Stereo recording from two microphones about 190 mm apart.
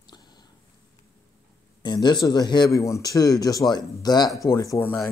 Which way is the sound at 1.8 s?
20° left (ahead or behind).